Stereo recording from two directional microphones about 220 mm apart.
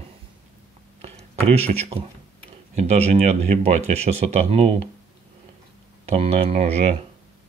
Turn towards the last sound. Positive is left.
turn(degrees=-30)  # may be behind; listen again after turning